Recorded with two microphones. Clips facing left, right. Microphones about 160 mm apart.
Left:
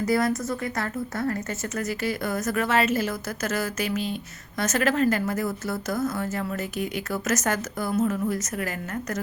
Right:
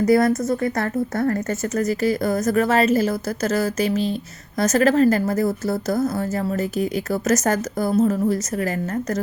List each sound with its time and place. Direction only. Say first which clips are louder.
0.0 s a woman's voice: right 7 dB; 40° right (ahead or behind)